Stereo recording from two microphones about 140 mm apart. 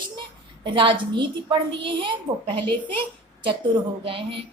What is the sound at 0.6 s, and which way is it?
A child's voice, 35° right (ahead or behind).